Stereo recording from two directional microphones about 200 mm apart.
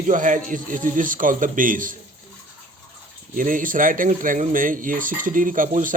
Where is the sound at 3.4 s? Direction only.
40° right (ahead or behind).